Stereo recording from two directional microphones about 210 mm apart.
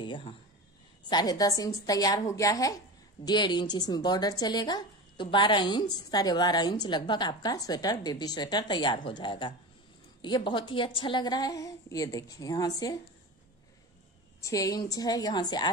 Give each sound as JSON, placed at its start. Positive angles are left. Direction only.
{"t": 0.0, "sound": "a woman's voice", "side_deg": 25}
{"t": 14.4, "sound": "a woman's voice", "side_deg": 15}